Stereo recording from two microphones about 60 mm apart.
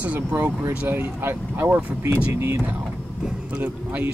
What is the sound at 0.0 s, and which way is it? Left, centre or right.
Speech, right.